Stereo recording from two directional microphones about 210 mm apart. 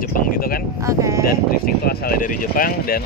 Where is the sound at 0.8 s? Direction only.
15° right (ahead or behind).